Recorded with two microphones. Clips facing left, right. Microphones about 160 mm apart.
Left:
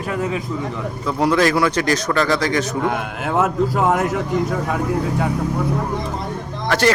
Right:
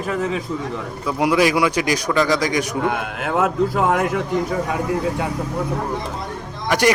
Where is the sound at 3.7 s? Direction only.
5° left (ahead or behind).